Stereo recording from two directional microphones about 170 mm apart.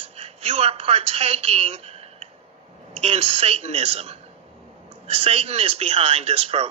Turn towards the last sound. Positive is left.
turn(degrees=-35)  # may be behind; listen again after turning